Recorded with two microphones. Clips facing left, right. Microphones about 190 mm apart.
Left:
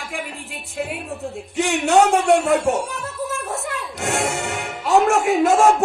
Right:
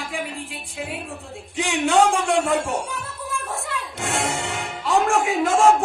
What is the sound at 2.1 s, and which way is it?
Speech, 40° left (ahead or behind).